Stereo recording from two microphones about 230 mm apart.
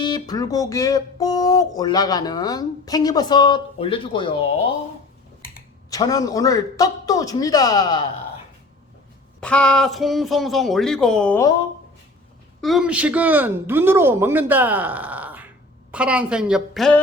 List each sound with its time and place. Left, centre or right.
0.0 s speech: centre
5.9 s speech: centre
9.4 s speech: centre
12.6 s speech: centre